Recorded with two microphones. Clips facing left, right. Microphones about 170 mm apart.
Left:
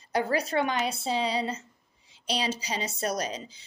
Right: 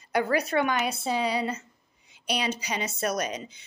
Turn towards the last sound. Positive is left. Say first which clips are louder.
# right 2 dB
turn(degrees=30)  # may be behind; listen again after turning